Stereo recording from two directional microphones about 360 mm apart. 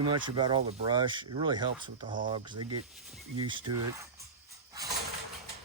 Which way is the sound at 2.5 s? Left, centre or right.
Right.